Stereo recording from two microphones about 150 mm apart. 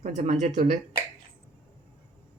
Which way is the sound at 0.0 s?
50° right (ahead or behind).